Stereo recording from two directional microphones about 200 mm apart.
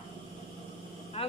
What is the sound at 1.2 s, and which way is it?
Speech, 30° left (ahead or behind).